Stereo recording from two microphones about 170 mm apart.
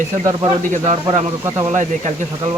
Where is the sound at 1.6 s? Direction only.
45° right (ahead or behind).